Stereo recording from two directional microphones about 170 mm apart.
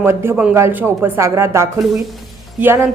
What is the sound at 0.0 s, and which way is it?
A woman's voice, 15° right (ahead or behind).